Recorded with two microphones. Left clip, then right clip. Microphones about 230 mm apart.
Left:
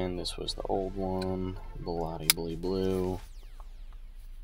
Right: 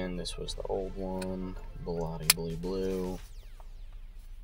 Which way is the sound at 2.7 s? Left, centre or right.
Left.